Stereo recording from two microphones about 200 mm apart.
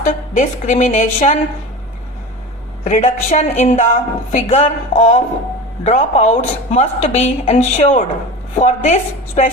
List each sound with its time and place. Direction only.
0.0 s a woman's voice: 40° left (ahead or behind)
2.8 s a woman's voice: 35° left (ahead or behind)